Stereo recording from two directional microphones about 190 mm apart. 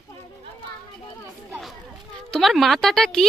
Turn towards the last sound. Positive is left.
turn(degrees=5)  # may be behind; listen again after turning